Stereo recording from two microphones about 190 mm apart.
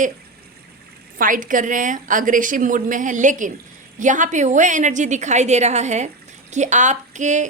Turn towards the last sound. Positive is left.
turn(degrees=-40)  # may be behind; listen again after turning